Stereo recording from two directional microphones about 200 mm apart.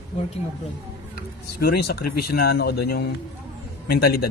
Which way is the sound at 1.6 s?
50° left (ahead or behind).